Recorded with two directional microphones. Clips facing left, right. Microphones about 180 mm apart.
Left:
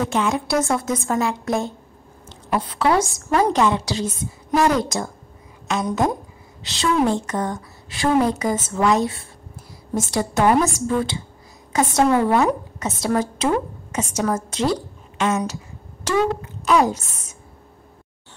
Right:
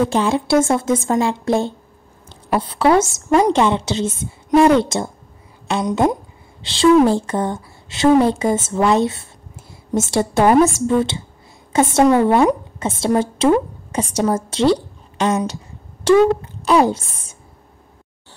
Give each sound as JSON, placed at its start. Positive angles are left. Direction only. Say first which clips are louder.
{"t": 0.0, "sound": "a woman's voice", "louder": "right 4 dB", "side_deg": -30}